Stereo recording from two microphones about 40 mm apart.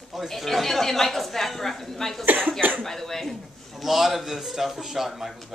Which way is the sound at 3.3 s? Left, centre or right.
Centre.